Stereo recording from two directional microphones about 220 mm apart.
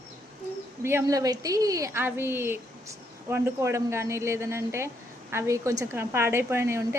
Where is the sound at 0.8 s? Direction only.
10° right (ahead or behind).